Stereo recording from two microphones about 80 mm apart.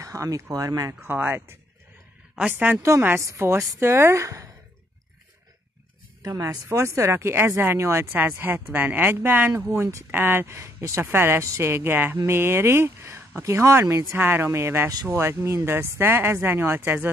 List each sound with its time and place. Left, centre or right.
0.0 s speech: right
1.0 s speech: right
3.2 s speech: right
6.2 s speech: right